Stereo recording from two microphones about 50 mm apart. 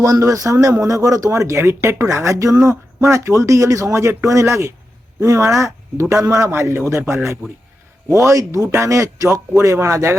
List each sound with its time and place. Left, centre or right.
0.0 s speech: right
6.5 s a man's voice: right
8.1 s speech: right
9.8 s speech: right